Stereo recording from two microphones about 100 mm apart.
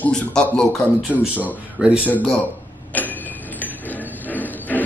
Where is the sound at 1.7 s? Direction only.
10° right (ahead or behind).